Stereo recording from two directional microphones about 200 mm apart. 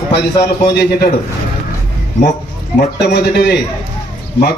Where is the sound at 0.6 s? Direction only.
55° left (ahead or behind).